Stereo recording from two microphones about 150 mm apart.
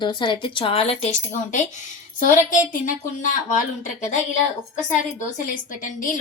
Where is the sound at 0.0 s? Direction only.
30° left (ahead or behind); by 3.2 s 60° left (ahead or behind).